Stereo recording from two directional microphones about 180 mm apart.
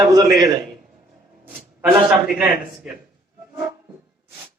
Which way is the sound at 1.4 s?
10° right (ahead or behind).